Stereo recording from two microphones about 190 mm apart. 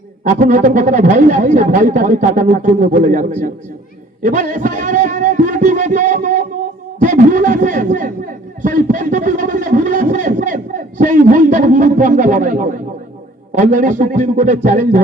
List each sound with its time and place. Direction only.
0.3 s speech: 45° right (ahead or behind)